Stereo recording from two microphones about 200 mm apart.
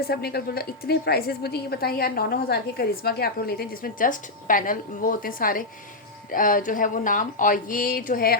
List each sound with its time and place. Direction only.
0.1 s a woman's voice: 50° left (ahead or behind)